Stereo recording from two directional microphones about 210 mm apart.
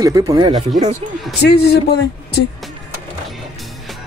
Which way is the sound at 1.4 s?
50° left (ahead or behind).